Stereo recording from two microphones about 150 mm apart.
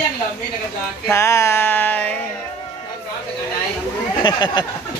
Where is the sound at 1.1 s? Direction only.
20° left (ahead or behind).